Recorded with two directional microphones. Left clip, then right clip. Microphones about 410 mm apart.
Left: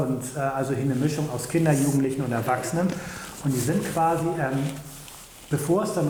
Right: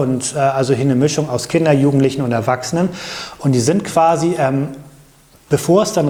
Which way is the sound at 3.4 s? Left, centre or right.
Right.